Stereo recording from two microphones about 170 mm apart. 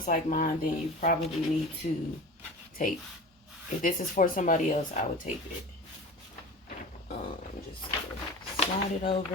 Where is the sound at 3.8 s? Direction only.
50° left (ahead or behind).